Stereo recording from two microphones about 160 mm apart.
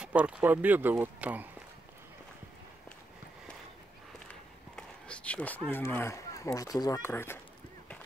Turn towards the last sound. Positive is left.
turn(degrees=15)  # may be behind; listen again after turning